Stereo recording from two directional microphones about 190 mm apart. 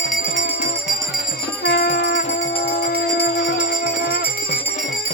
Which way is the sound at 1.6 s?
65° left (ahead or behind).